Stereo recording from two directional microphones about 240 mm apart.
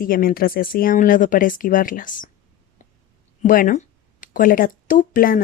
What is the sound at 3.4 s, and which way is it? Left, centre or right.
Speech, left.